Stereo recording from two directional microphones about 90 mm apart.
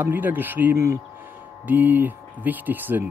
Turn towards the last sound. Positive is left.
turn(degrees=-20)  # may be behind; listen again after turning